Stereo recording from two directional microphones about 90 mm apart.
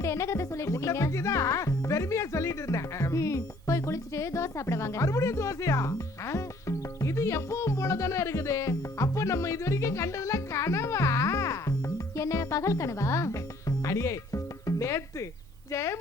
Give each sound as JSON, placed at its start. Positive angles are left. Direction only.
{"t": 0.0, "sound": "music", "side_deg": 35}
{"t": 15.7, "sound": "a woman's voice", "side_deg": 30}